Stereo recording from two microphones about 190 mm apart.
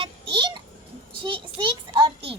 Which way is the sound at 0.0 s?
25° right (ahead or behind).